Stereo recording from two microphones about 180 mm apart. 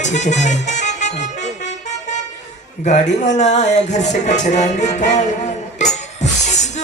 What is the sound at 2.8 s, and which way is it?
Speech, 40° left (ahead or behind).